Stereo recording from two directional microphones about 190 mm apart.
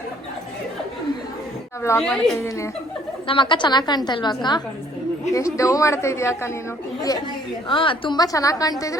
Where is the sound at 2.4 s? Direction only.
15° left (ahead or behind).